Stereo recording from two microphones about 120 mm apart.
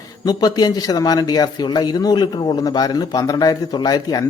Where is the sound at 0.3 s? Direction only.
30° left (ahead or behind).